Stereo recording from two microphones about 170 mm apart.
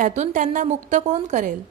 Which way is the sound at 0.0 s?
45° right (ahead or behind).